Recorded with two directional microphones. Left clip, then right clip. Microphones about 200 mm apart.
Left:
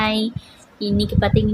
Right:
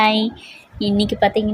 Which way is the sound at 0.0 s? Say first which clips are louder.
Right 5 dB; 5° right (ahead or behind).